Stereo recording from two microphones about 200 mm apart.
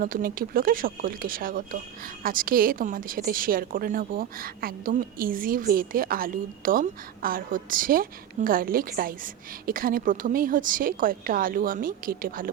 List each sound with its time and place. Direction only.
0.0 s a woman's voice: 45° right (ahead or behind)